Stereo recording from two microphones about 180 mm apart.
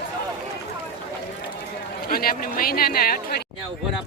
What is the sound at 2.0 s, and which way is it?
Speech, 55° left (ahead or behind).